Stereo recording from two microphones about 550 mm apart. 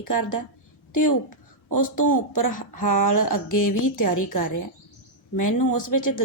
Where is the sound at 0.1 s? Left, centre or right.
Left.